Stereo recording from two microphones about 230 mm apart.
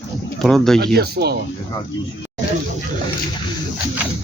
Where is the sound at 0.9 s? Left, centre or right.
Right.